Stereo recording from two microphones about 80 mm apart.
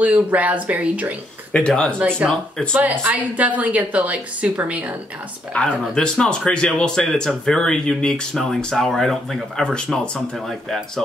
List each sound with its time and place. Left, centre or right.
0.0 s a woman's voice: centre
1.5 s speech: centre
2.7 s a woman's voice: right
5.5 s speech: centre